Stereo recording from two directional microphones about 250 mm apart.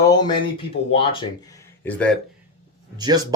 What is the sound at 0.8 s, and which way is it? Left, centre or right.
Speech, left.